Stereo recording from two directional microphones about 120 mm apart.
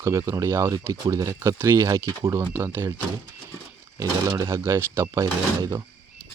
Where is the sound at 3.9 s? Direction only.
30° right (ahead or behind).